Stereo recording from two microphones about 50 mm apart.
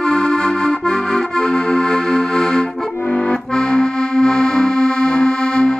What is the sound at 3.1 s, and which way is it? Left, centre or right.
Accordion, left.